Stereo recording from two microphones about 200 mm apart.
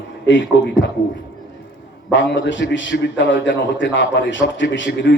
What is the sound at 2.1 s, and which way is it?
A man's voice, 65° left (ahead or behind).